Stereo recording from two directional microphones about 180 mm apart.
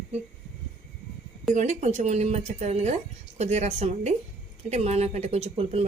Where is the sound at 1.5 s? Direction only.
40° right (ahead or behind).